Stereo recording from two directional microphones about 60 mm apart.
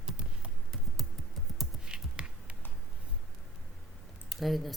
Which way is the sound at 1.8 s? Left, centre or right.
Centre.